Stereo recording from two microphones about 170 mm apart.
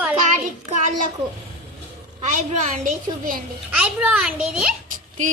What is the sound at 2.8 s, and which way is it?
Child singing, 55° right (ahead or behind).